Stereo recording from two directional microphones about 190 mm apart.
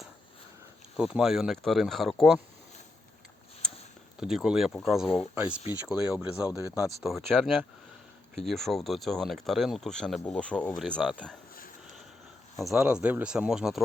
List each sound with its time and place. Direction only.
0.9 s speech: 5° right (ahead or behind)
4.2 s speech: 5° right (ahead or behind)
12.5 s speech: centre (ahead or behind)